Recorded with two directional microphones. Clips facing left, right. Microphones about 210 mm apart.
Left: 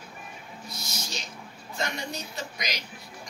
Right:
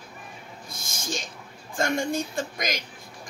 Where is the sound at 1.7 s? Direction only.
50° right (ahead or behind).